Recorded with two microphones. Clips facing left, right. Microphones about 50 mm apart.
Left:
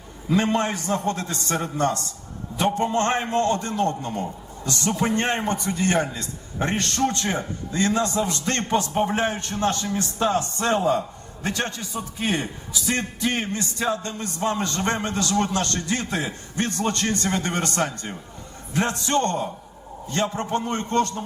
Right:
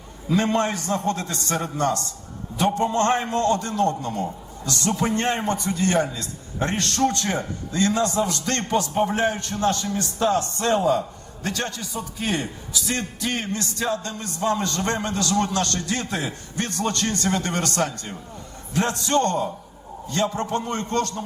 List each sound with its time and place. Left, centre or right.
0.3 s a man's voice: centre
2.7 s a man's voice: left
9.8 s a man's voice: centre